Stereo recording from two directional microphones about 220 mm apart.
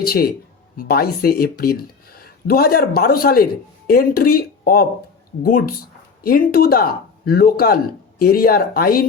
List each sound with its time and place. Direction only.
0.0 s speech: 45° left (ahead or behind)